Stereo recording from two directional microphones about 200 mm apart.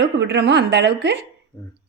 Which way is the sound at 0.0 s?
60° right (ahead or behind).